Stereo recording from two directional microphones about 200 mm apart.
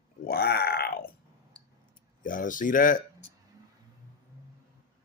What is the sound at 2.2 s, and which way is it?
Speech, 40° left (ahead or behind).